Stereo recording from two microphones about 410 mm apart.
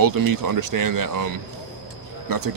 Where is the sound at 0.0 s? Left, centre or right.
Right.